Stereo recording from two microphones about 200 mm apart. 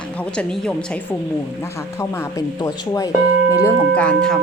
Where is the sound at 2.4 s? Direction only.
15° left (ahead or behind).